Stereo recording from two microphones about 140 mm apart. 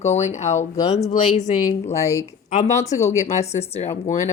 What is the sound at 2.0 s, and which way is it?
Speech, 20° left (ahead or behind).